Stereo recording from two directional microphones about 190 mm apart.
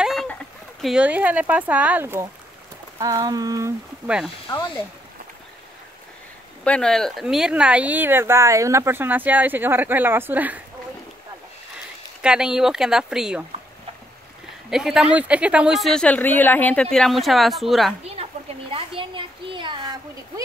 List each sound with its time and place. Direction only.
0.0 s speech: centre (ahead or behind); by 3.7 s 20° right (ahead or behind)
4.5 s speech: 20° left (ahead or behind)
6.6 s speech: 5° left (ahead or behind)
12.2 s speech: 5° right (ahead or behind)
14.7 s speech: centre (ahead or behind)
18.1 s a sound: 30° right (ahead or behind)